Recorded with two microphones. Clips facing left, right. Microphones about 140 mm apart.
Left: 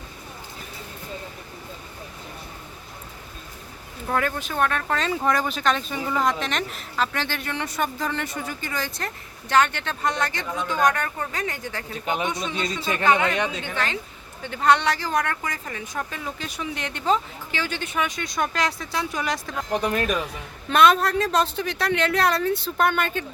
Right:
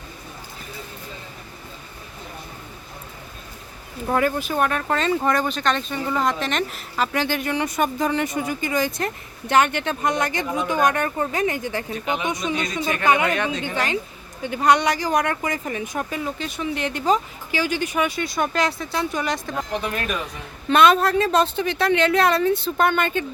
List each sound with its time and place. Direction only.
4.0 s speech: 10° right (ahead or behind)
13.1 s speech: 15° right (ahead or behind)
16.4 s speech: centre (ahead or behind)
19.8 s speech: 35° left (ahead or behind)
20.7 s speech: centre (ahead or behind)